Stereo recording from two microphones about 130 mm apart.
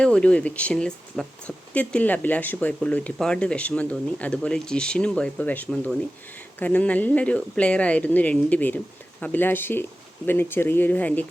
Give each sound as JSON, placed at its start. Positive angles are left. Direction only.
{"t": 0.0, "sound": "speech", "side_deg": 5}